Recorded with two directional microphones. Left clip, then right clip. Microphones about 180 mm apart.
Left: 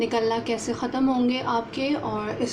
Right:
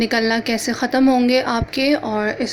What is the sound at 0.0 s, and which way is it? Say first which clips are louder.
A woman's voice: right 5 dB; 45° right (ahead or behind).